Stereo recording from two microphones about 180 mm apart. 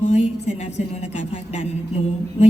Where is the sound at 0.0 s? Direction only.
40° left (ahead or behind).